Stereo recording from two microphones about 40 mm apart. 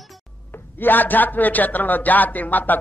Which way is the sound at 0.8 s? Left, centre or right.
Left.